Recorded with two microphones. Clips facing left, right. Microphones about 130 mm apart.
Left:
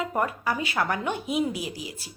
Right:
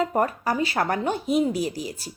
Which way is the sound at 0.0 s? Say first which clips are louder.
Right 4 dB; 40° right (ahead or behind).